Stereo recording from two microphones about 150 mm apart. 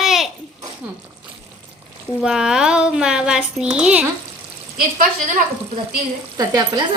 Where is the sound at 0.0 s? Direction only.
Centre (ahead or behind).